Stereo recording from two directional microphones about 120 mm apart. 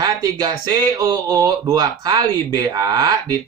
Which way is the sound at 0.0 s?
30° right (ahead or behind).